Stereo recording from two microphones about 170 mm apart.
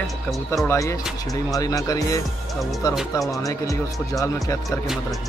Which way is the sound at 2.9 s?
Centre (ahead or behind).